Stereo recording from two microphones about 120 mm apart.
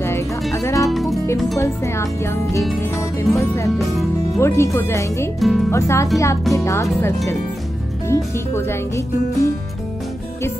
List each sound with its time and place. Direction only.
0.5 s music: 25° left (ahead or behind)
0.8 s music: centre (ahead or behind)
1.6 s speech: 20° left (ahead or behind)
3.7 s speech: centre (ahead or behind)
4.4 s speech: 20° left (ahead or behind)
5.4 s speech: centre (ahead or behind)
5.7 s speech: 20° left (ahead or behind)
8.1 s speech: 20° left (ahead or behind)